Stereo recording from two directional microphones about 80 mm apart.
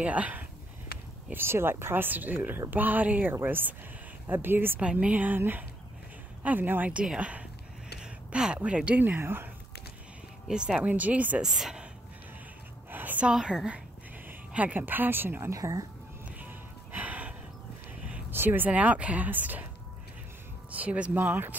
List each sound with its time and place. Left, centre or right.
0.0 s speech: centre
1.3 s speech: right
10.5 s speech: centre
11.4 s speech: centre
12.9 s a sound: right
13.3 s speech: centre
14.5 s speech: centre
15.5 s speech: right
16.3 s music: right
18.3 s speech: right
20.7 s speech: centre